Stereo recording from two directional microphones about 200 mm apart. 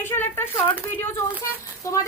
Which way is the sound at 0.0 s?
10° left (ahead or behind).